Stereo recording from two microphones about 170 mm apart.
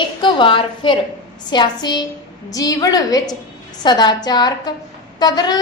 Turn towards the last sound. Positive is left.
turn(degrees=25)  # may be behind; listen again after turning